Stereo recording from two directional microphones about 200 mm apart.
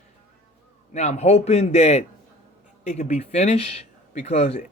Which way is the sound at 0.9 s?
35° left (ahead or behind).